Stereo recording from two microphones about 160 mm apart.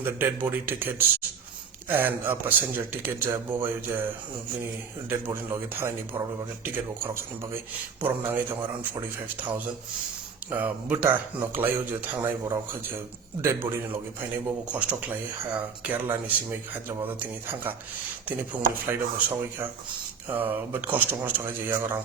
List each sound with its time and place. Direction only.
0.0 s a man's voice: 15° right (ahead or behind)